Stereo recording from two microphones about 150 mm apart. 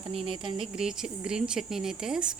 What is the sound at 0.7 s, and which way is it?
Speech, 5° right (ahead or behind).